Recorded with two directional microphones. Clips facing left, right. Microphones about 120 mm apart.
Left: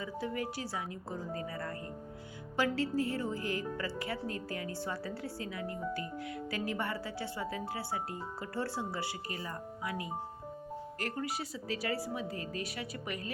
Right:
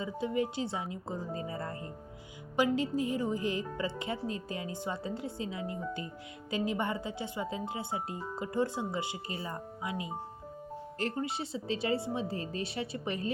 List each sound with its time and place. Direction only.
0.0 s speech: 20° right (ahead or behind)